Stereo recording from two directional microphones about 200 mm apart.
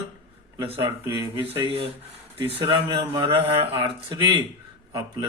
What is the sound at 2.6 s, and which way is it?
Speech, 25° right (ahead or behind).